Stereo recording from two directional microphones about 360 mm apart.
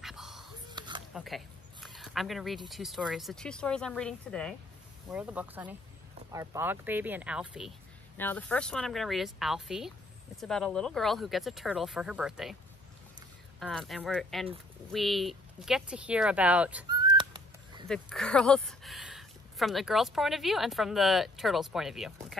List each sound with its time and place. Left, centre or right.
0.0 s whispering: centre
0.7 s a sound: centre
1.1 s a sound: centre
2.7 s speech: centre
13.6 s speech: centre
17.8 s speech: centre